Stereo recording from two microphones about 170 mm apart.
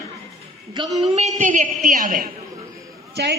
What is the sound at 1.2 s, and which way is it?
A man's voice, 45° right (ahead or behind).